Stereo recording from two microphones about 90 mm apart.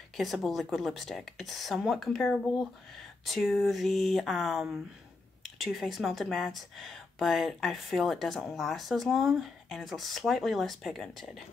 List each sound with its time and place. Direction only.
0.2 s speech: centre (ahead or behind)